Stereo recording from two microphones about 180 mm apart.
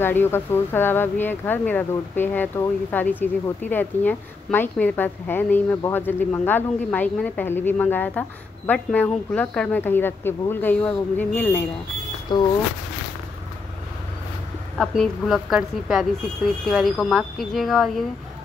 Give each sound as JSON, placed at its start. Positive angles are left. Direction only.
{"t": 0.0, "sound": "speech", "side_deg": 10}
{"t": 12.3, "sound": "speech", "side_deg": 25}
{"t": 14.8, "sound": "speech", "side_deg": 0}